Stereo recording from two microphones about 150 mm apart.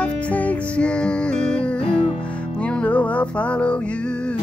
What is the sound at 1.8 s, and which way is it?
Music, 40° left (ahead or behind).